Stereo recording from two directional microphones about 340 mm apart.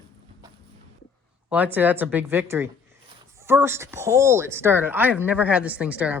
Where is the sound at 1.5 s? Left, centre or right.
Centre.